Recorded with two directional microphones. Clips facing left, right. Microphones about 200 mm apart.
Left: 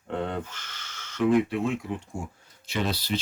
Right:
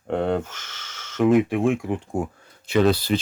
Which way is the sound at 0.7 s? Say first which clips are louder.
Right 2 dB; 90° right.